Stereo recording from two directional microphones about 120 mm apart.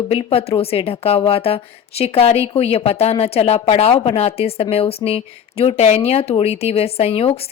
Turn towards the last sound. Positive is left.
turn(degrees=55)  # may be behind; listen again after turning